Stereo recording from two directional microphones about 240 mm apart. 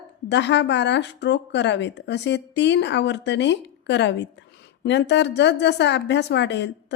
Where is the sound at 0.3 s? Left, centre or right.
Left.